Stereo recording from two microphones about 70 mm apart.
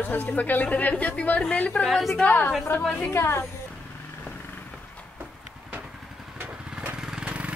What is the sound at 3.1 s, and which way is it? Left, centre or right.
Speech, left.